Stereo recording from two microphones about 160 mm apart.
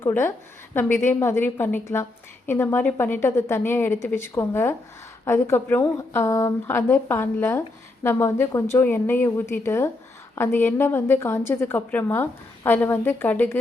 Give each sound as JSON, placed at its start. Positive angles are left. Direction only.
{"t": 0.0, "sound": "a woman's voice", "side_deg": 15}